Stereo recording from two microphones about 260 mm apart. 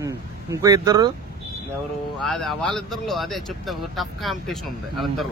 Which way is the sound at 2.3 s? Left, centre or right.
Centre.